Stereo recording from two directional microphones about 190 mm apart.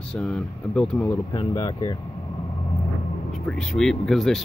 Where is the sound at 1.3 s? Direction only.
20° left (ahead or behind).